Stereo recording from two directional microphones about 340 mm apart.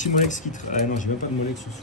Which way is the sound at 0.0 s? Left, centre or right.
Left.